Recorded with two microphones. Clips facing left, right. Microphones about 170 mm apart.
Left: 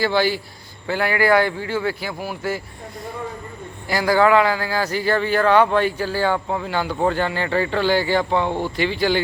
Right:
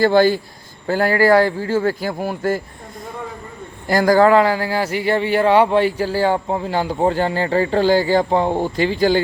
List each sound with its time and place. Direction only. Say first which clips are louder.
0.0 s a man's voice: right 6 dB; 50° right (ahead or behind)
3.8 s a man's voice: right 4 dB; 45° right (ahead or behind)